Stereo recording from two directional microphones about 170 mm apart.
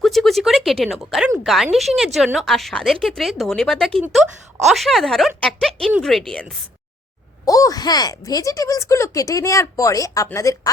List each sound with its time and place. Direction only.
0.0 s a sound: centre (ahead or behind)
1.5 s speech: centre (ahead or behind)
7.4 s speech: 20° left (ahead or behind)